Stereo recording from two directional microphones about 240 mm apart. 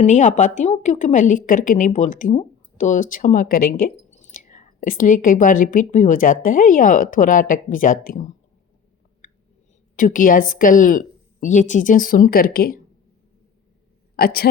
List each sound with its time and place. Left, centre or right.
0.0 s a woman's voice: left
3.8 s a sound: left
4.3 s a woman's voice: left
9.9 s a woman's voice: left
14.2 s a woman's voice: left